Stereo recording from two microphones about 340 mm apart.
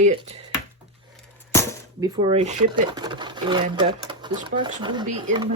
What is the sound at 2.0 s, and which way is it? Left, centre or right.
Speech, centre.